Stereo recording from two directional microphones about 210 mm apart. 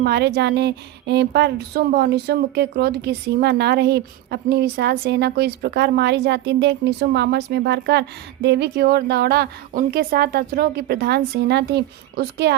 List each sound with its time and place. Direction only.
0.0 s speech: 50° right (ahead or behind)